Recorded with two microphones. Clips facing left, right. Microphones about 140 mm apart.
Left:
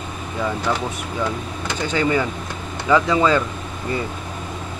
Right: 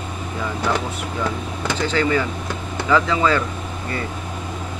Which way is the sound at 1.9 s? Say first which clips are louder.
Left 2 dB; 15° left (ahead or behind).